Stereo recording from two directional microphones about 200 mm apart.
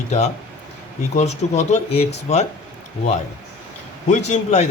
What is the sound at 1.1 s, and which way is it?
Speech, 35° left (ahead or behind).